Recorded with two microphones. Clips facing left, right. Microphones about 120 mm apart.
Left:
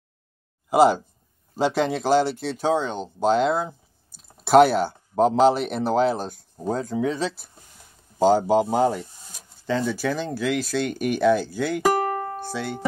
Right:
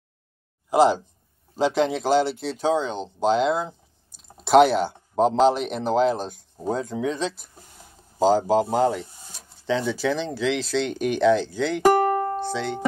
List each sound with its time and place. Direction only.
0.7 s a sound: 5° left (ahead or behind)
1.5 s speech: centre (ahead or behind)
12.1 s music: 30° right (ahead or behind)
12.4 s speech: 5° left (ahead or behind)